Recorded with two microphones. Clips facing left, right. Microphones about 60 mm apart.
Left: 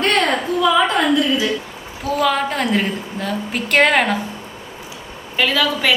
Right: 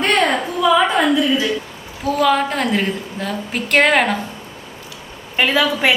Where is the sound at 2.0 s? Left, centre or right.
Centre.